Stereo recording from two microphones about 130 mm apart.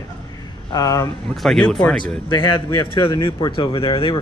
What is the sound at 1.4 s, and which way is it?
Speech, 5° left (ahead or behind).